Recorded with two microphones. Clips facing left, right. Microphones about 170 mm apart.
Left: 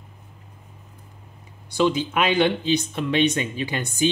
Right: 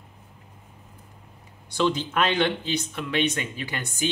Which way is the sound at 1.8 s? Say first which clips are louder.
Left 3 dB; 10° left (ahead or behind).